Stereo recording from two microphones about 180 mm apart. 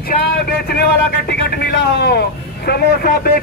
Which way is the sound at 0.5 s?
60° left (ahead or behind).